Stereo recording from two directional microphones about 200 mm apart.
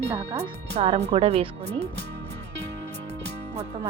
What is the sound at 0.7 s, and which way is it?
Speech, 35° right (ahead or behind).